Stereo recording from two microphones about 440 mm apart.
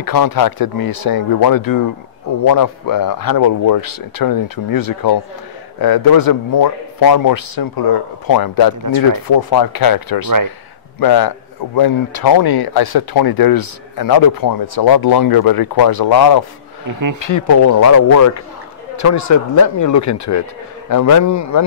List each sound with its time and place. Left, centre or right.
0.0 s a man's voice: left
17.2 s speech: left